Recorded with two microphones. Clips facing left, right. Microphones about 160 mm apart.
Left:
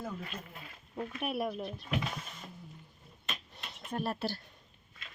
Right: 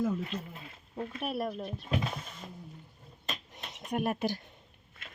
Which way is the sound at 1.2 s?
Centre (ahead or behind).